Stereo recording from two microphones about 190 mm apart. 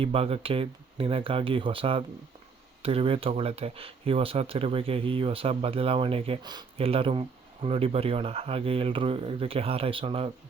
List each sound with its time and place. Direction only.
0.0 s speech: 30° right (ahead or behind)